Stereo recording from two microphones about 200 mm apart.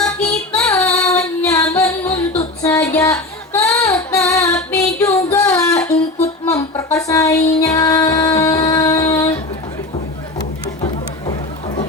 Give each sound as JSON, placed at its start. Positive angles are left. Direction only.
{"t": 0.0, "sound": "female singing", "side_deg": 5}
{"t": 2.6, "sound": "music", "side_deg": 15}
{"t": 3.7, "sound": "child singing", "side_deg": 5}
{"t": 4.9, "sound": "female singing", "side_deg": 15}
{"t": 8.6, "sound": "a sound", "side_deg": 20}